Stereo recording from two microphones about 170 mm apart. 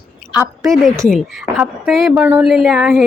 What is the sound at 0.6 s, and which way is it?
A woman's voice, centre (ahead or behind).